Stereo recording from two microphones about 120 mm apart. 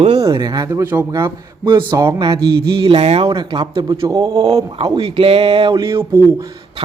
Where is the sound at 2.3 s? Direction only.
30° right (ahead or behind).